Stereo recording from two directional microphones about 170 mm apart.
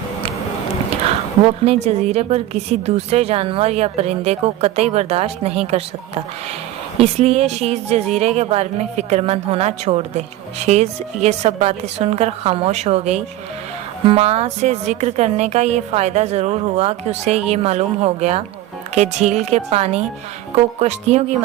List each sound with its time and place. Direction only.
1.0 s a woman's voice: 35° right (ahead or behind)
7.0 s a woman's voice: 40° right (ahead or behind)